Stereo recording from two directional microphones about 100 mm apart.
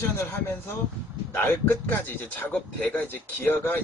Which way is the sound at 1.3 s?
20° left (ahead or behind).